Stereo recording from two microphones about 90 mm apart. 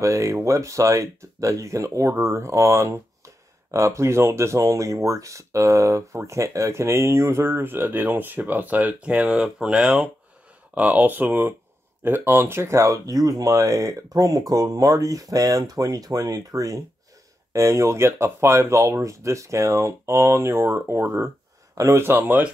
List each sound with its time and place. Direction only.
0.0 s speech: 35° right (ahead or behind)